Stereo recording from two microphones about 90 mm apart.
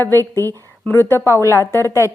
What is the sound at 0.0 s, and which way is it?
A woman's voice, 25° left (ahead or behind).